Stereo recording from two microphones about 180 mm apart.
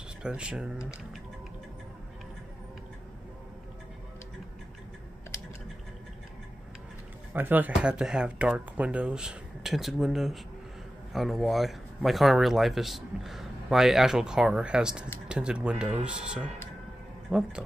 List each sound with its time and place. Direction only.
0.2 s speech: 5° right (ahead or behind)
7.3 s speech: 10° right (ahead or behind)